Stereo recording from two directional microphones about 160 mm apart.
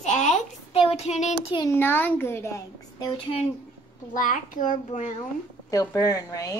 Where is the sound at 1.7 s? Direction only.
15° left (ahead or behind).